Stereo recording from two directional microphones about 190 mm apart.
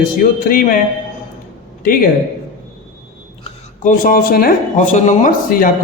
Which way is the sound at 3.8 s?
45° left (ahead or behind).